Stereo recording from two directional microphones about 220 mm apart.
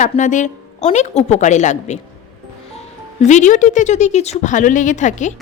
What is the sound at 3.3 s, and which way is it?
A woman's voice, 35° left (ahead or behind).